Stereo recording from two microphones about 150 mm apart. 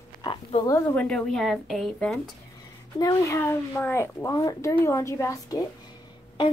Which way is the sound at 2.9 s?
20° left (ahead or behind).